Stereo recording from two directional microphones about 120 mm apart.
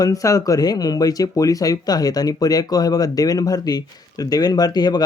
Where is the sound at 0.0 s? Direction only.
30° left (ahead or behind).